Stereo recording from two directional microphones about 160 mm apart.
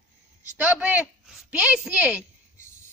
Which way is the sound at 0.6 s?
10° right (ahead or behind).